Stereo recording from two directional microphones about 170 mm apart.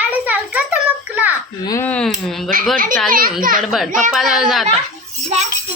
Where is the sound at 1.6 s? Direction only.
20° left (ahead or behind).